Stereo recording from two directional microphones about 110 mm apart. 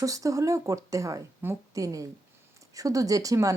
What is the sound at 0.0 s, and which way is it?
Speech, 30° right (ahead or behind).